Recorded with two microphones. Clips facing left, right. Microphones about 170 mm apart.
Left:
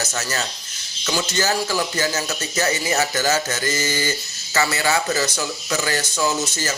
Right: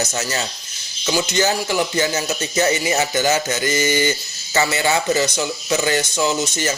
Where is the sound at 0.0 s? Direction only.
20° right (ahead or behind).